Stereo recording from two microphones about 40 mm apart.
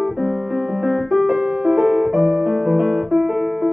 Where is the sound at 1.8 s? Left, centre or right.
Centre.